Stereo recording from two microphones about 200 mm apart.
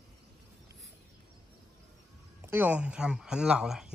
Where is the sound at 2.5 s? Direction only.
10° right (ahead or behind).